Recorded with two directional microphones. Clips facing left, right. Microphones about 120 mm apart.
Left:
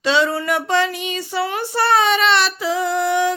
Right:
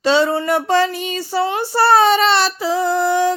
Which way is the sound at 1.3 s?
30° right (ahead or behind).